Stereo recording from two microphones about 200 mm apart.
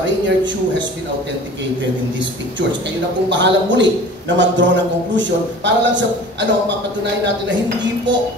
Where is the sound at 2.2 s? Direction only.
65° right (ahead or behind).